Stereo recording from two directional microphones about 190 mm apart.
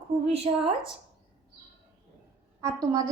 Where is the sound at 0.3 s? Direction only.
30° right (ahead or behind).